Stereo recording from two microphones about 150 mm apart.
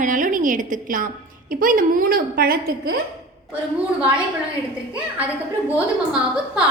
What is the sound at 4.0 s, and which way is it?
Speech, 10° right (ahead or behind).